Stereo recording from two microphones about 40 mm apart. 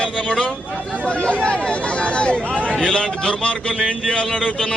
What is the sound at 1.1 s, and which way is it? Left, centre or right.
A man's voice, left.